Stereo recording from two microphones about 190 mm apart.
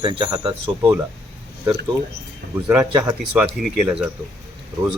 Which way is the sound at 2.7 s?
15° right (ahead or behind).